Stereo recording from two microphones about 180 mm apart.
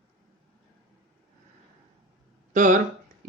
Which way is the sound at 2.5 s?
45° right (ahead or behind).